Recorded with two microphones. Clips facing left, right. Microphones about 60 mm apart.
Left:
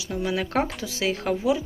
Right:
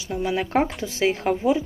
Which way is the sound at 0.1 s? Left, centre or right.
Centre.